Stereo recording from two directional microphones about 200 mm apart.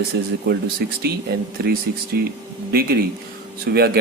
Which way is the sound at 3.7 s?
50° right (ahead or behind).